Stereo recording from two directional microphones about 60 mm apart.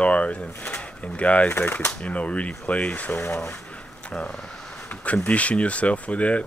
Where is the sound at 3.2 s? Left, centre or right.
Left.